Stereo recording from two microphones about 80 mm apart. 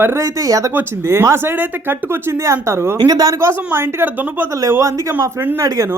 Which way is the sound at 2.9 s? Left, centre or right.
Right.